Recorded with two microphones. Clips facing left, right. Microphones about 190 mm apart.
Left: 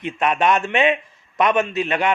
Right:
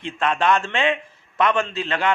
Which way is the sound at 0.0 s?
20° left (ahead or behind).